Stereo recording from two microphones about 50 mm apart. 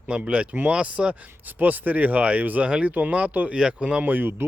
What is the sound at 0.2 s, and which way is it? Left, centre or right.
Speech, right.